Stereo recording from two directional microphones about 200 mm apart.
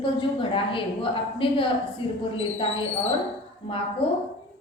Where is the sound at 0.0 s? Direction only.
25° left (ahead or behind).